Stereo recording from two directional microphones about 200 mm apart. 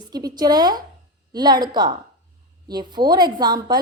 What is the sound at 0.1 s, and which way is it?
A woman's voice, 20° right (ahead or behind).